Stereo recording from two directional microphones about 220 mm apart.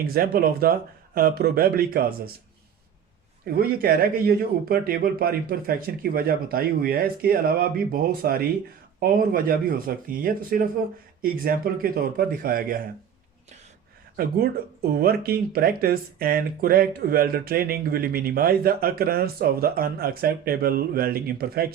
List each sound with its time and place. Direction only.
0.0 s speech: 40° right (ahead or behind)
3.4 s speech: 45° right (ahead or behind)
14.2 s speech: 45° right (ahead or behind)